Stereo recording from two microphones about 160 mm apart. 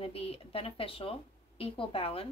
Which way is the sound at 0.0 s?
35° left (ahead or behind).